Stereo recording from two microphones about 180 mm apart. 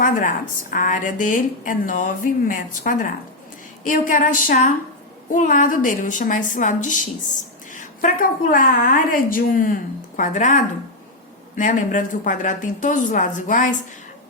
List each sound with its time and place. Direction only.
0.0 s a woman's voice: 45° left (ahead or behind)